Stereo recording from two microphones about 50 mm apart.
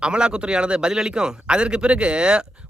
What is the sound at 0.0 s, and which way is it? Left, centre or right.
A man's voice, centre.